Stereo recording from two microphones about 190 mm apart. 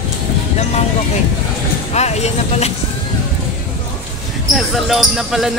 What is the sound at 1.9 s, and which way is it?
Speech, 35° left (ahead or behind).